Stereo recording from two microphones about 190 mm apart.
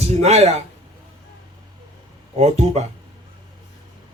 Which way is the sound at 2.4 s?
35° right (ahead or behind).